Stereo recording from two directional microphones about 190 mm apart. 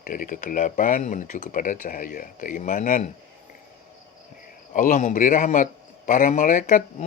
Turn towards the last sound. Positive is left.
turn(degrees=45)  # may be behind; listen again after turning